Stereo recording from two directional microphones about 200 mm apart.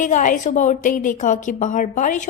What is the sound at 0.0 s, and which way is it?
A woman's voice, 40° left (ahead or behind).